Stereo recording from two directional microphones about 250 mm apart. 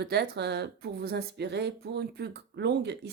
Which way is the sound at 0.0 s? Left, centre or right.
Right.